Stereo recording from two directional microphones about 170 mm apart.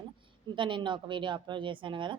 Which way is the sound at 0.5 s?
30° right (ahead or behind).